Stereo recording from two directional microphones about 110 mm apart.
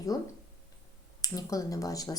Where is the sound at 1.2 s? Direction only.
30° left (ahead or behind).